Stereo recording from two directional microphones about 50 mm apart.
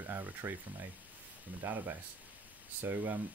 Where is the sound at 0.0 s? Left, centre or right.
Right.